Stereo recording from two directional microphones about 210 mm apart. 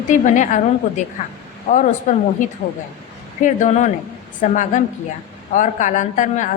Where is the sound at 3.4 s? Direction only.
35° left (ahead or behind).